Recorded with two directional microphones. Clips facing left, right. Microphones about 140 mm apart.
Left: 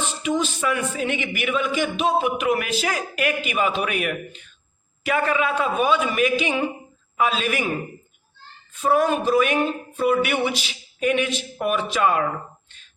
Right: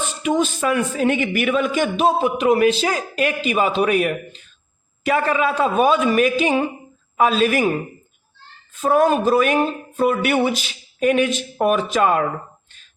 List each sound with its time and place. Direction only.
0.2 s a man's voice: 50° right (ahead or behind)
8.8 s speech: 45° right (ahead or behind)